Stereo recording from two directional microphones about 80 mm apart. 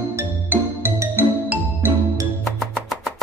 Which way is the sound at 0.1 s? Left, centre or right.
Right.